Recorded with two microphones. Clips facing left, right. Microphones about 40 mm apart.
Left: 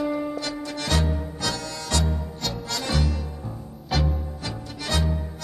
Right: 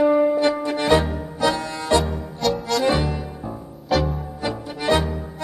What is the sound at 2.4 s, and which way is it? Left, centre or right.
Music, centre.